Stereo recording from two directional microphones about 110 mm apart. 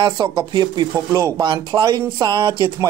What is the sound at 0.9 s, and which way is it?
Speech, 30° right (ahead or behind).